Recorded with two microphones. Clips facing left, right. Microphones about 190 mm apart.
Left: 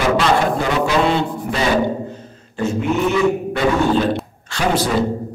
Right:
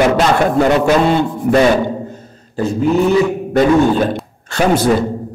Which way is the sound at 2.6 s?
35° right (ahead or behind).